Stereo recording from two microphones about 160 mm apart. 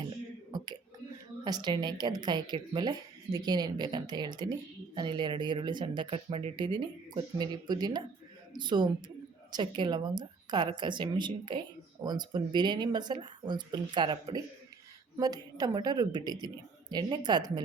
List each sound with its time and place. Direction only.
0.5 s whispering: 25° right (ahead or behind)
1.5 s a woman's voice: 25° right (ahead or behind)